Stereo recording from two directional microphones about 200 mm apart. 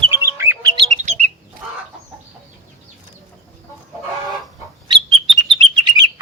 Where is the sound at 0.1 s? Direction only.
10° right (ahead or behind).